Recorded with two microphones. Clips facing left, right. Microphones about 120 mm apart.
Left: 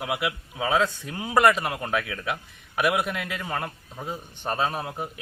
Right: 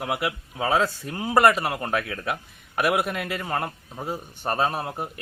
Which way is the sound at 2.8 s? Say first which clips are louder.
Right 1 dB; 5° right (ahead or behind).